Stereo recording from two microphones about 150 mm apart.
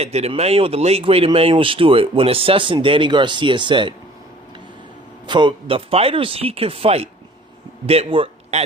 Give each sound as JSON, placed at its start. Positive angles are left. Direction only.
{"t": 0.0, "sound": "speech", "side_deg": -45}
{"t": 5.2, "sound": "a man's voice", "side_deg": -30}